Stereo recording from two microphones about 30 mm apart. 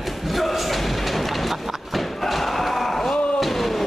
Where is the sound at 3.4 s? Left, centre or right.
Centre.